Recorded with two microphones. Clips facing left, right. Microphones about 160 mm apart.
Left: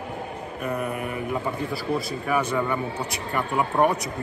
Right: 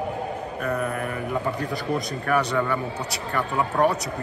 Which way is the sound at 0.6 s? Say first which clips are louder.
Right 1 dB; 10° left (ahead or behind).